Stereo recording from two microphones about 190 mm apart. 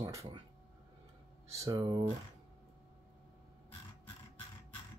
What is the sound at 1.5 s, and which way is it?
Speech, 20° right (ahead or behind).